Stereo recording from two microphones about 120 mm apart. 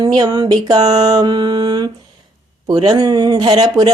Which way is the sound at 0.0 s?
35° right (ahead or behind).